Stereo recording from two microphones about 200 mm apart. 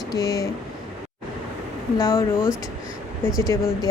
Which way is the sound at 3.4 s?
15° left (ahead or behind).